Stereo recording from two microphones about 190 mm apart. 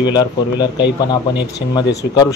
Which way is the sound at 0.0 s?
20° left (ahead or behind).